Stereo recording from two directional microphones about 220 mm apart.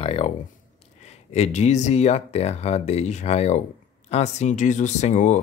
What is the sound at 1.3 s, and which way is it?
Speech, 30° left (ahead or behind).